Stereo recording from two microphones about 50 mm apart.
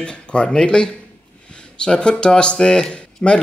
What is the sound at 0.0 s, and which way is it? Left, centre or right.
Speech, left.